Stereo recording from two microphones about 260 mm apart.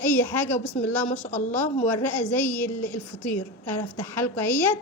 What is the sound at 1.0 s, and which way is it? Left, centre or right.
Speech, left.